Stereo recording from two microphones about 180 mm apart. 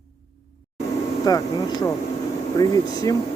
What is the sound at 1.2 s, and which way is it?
Speech, 20° left (ahead or behind).